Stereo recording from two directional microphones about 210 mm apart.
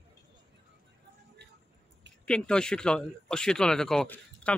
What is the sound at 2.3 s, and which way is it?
Speech, 5° left (ahead or behind).